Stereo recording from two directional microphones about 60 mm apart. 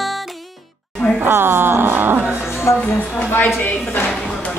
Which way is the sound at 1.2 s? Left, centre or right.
Right.